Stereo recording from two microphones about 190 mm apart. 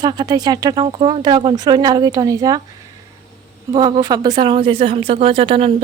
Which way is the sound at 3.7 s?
20° right (ahead or behind).